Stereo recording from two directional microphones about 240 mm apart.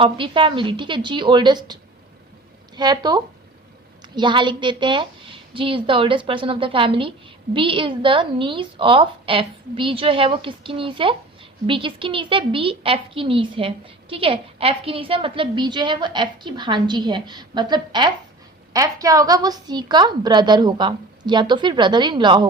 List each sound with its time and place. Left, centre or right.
0.0 s a woman's voice: right